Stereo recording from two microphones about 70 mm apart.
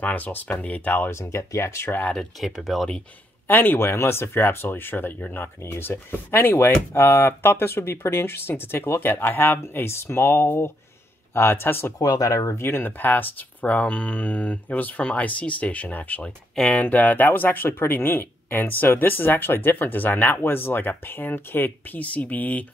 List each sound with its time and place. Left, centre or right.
0.0 s speech: left
1.1 s speech: left
2.4 s speech: centre
3.4 s speech: left
12.0 s speech: left